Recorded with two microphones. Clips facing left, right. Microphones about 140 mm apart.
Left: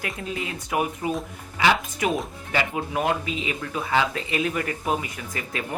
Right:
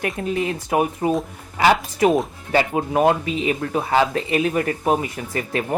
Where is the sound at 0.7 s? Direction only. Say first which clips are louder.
Right 5 dB; 35° right (ahead or behind).